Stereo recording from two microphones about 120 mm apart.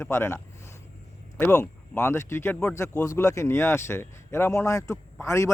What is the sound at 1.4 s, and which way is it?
A man's voice, 15° left (ahead or behind).